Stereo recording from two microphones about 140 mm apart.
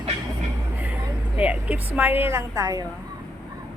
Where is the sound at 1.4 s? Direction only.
10° right (ahead or behind).